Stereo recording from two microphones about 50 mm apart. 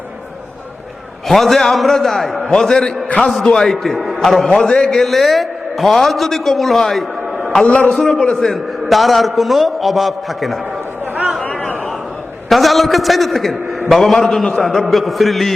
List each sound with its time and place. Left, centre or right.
1.3 s a man's voice: centre
5.0 s a man's voice: centre
11.2 s chatter: centre
11.4 s a sound: left
12.5 s a man's voice: centre